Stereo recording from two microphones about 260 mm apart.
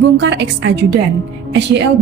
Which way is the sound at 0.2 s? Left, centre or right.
Right.